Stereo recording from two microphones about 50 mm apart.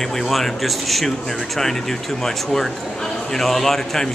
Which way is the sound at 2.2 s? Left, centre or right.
Centre.